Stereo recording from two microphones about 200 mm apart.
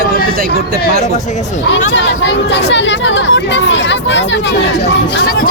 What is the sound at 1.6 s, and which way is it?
Speech, 65° left (ahead or behind).